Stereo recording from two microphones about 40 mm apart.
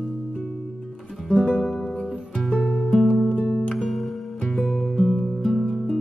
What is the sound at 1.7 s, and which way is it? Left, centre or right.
Music, centre.